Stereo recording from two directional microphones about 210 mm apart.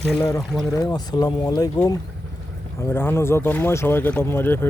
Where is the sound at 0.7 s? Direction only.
15° left (ahead or behind).